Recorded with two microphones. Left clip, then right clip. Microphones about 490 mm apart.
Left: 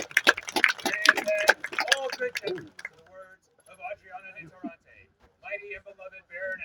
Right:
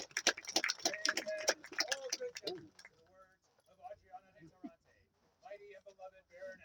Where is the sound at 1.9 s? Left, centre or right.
Right.